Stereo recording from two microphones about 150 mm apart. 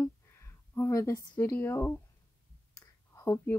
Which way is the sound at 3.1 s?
20° left (ahead or behind).